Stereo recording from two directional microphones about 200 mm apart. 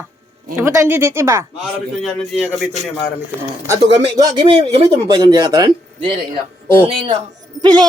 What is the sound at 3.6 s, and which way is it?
Speech, 15° right (ahead or behind).